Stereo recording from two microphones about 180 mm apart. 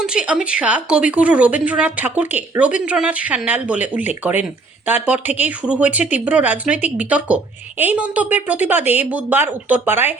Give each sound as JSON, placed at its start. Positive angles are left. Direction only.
{"t": 0.0, "sound": "speech", "side_deg": -5}